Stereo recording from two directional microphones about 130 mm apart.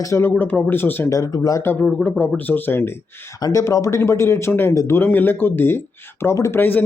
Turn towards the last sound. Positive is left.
turn(degrees=15)  # may be behind; listen again after turning